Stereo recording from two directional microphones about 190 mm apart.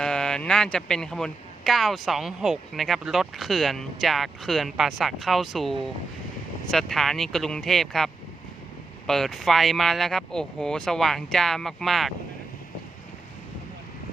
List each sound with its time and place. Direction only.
0.0 s speech: 5° left (ahead or behind)